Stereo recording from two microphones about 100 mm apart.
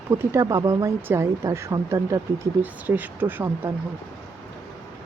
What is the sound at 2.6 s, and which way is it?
Speech, 15° right (ahead or behind).